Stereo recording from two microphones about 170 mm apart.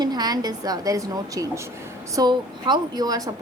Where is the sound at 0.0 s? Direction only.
25° right (ahead or behind).